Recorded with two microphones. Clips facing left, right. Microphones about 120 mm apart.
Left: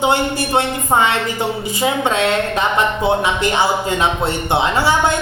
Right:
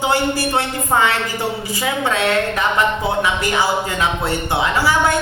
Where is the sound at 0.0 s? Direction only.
20° left (ahead or behind).